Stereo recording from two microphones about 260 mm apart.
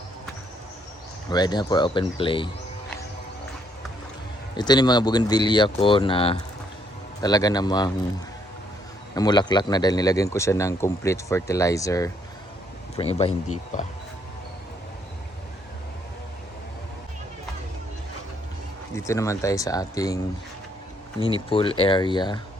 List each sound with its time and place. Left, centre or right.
1.3 s speech: centre
4.5 s speech: centre
9.1 s speech: centre
18.9 s speech: centre
21.2 s speech: centre